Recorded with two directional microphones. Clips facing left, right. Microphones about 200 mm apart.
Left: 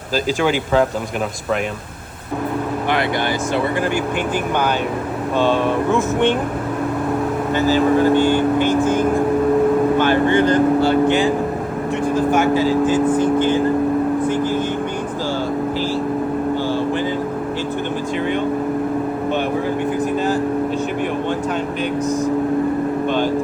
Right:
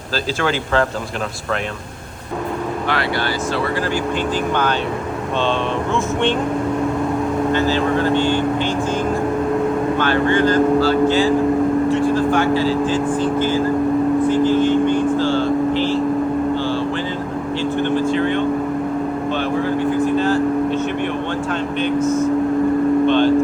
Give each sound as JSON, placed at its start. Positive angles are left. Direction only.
{"t": 0.4, "sound": "speech", "side_deg": 10}
{"t": 5.4, "sound": "speech", "side_deg": 15}
{"t": 7.5, "sound": "speech", "side_deg": 10}
{"t": 8.1, "sound": "speech", "side_deg": 50}
{"t": 10.0, "sound": "speech", "side_deg": 15}
{"t": 12.1, "sound": "vehicle", "side_deg": 20}
{"t": 12.9, "sound": "speech", "side_deg": 20}
{"t": 18.1, "sound": "vehicle", "side_deg": 10}
{"t": 23.0, "sound": "vehicle", "side_deg": 10}